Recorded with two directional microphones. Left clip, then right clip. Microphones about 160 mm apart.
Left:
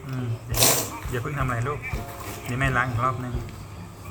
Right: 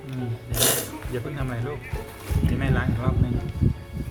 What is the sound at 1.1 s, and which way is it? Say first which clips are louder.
Speech: left 3 dB; 30° right (ahead or behind).